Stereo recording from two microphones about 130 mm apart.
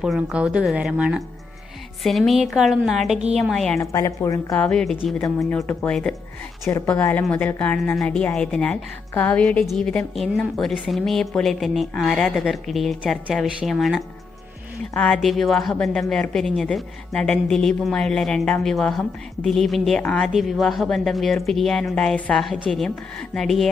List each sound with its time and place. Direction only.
0.0 s a woman's voice: 5° right (ahead or behind)
3.8 s a woman's voice: 25° left (ahead or behind)
4.6 s speech: 5° left (ahead or behind)
6.6 s a woman's voice: 15° left (ahead or behind); by 23.7 s centre (ahead or behind)